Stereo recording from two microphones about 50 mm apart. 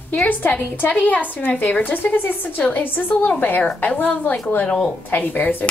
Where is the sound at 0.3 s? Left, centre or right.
Left.